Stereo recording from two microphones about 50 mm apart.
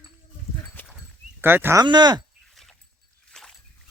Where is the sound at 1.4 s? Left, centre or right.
Right.